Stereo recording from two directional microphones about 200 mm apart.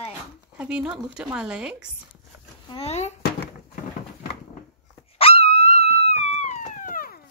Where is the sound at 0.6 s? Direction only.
5° right (ahead or behind).